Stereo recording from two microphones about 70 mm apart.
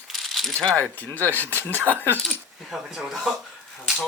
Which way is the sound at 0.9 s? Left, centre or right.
Left.